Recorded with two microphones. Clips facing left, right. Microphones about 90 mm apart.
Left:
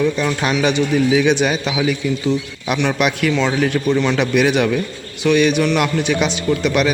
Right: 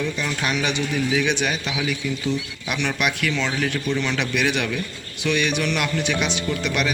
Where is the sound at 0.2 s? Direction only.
35° left (ahead or behind).